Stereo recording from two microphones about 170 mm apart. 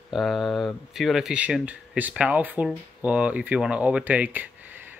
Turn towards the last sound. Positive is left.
turn(degrees=-10)  # may be behind; listen again after turning